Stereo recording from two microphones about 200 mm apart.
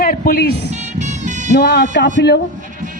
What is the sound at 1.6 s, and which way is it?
Speech, 55° left (ahead or behind).